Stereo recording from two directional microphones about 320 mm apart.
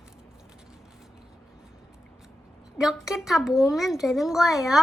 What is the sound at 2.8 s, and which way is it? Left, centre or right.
Speech, centre.